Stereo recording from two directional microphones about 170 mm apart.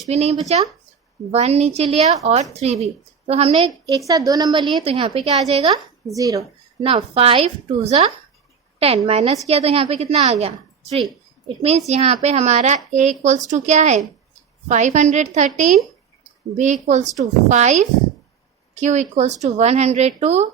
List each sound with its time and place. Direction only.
0.0 s a woman's voice: 40° right (ahead or behind)
3.8 s a woman's voice: 20° right (ahead or behind); by 5.7 s 40° right (ahead or behind)
5.7 s a woman's voice: 20° right (ahead or behind)
6.8 s a woman's voice: 35° right (ahead or behind)
16.9 s a woman's voice: 45° right (ahead or behind)